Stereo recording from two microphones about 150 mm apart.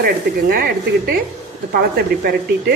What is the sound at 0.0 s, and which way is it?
Speech, 85° right.